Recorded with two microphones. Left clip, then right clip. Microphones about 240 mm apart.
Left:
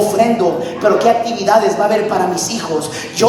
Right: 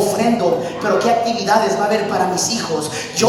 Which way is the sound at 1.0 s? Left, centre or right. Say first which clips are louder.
Left 3 dB; left.